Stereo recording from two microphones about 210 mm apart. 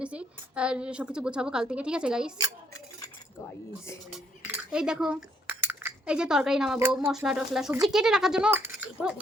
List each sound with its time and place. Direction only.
0.0 s a woman's voice: 5° right (ahead or behind)
4.1 s cutlery: 5° right (ahead or behind)
6.9 s a woman's voice: centre (ahead or behind)